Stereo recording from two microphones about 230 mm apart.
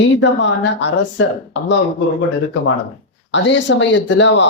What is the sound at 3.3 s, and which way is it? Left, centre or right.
Speech, left.